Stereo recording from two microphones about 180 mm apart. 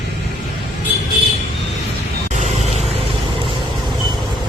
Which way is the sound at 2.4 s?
40° right (ahead or behind).